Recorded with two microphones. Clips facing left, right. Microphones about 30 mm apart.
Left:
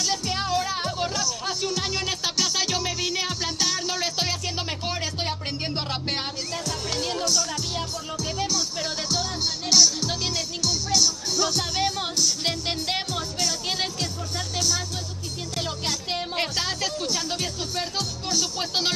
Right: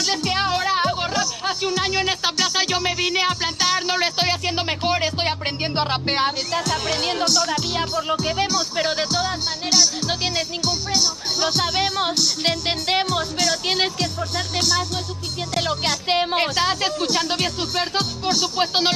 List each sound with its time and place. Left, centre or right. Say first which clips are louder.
0.2 s speech: right 5 dB; right
6.6 s speech: right 4 dB; right
7.2 s music: right 5 dB; right
9.1 s music: right 4 dB; centre
10.0 s speech: right 4 dB; right
11.4 s music: right 5 dB; right
13.1 s speech: right 6 dB; right
15.5 s speech: right 7 dB; right
16.3 s speech: right 6 dB; right
17.0 s speech: right 6 dB; right